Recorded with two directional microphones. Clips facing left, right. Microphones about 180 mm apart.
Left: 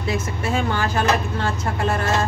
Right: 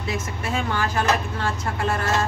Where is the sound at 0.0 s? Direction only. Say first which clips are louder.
Left 4 dB; 30° left (ahead or behind).